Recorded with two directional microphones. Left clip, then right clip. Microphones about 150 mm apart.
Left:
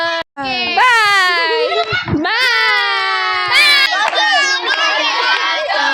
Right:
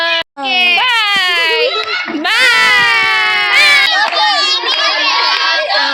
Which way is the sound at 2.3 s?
25° left (ahead or behind).